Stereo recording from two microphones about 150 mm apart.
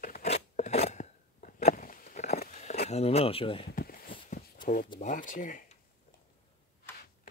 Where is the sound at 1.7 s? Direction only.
70° left (ahead or behind).